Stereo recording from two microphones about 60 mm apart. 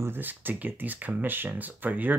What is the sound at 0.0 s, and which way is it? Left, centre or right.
Speech, right.